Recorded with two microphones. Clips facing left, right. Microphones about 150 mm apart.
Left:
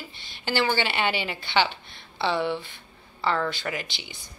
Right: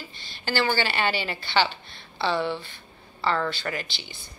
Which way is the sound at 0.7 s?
20° left (ahead or behind).